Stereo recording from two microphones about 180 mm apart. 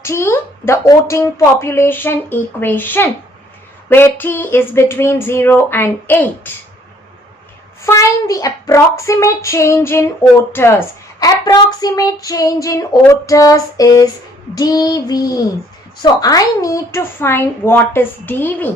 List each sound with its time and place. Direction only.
0.0 s a woman's voice: 15° left (ahead or behind)
7.9 s a woman's voice: 20° left (ahead or behind)